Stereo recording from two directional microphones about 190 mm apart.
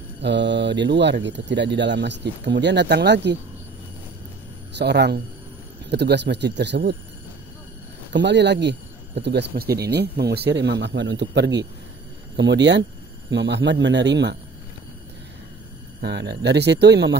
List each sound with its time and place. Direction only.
0.2 s speech: 65° right (ahead or behind)
4.7 s speech: 60° right (ahead or behind)
8.1 s speech: 65° right (ahead or behind)
16.0 s speech: 60° right (ahead or behind)